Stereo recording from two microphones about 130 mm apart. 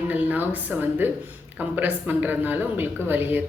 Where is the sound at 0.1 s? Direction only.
15° right (ahead or behind).